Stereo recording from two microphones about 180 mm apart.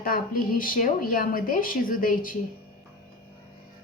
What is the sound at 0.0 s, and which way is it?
A woman's voice, 50° left (ahead or behind).